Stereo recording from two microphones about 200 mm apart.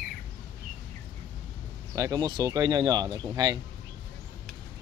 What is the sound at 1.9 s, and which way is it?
Speech, 15° right (ahead or behind).